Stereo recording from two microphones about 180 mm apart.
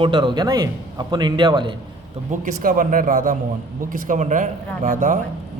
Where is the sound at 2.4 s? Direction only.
50° right (ahead or behind).